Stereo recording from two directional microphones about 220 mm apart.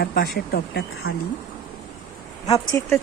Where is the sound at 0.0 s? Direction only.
45° left (ahead or behind).